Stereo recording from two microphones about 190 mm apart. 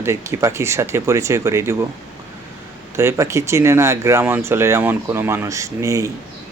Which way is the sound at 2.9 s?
15° right (ahead or behind).